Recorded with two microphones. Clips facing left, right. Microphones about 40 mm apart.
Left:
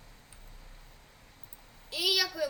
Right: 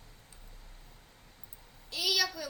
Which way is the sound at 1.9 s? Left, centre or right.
Centre.